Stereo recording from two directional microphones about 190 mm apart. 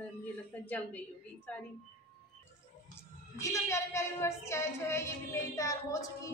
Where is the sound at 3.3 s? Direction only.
15° left (ahead or behind).